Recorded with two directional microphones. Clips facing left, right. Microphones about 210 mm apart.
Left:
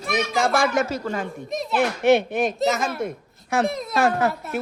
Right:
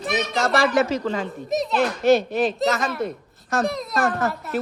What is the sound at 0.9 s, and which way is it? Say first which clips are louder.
Speech: right 2 dB; 10° left (ahead or behind).